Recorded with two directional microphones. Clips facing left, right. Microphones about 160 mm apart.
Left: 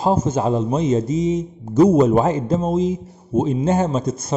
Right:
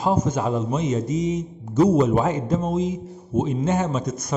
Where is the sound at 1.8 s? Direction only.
40° left (ahead or behind).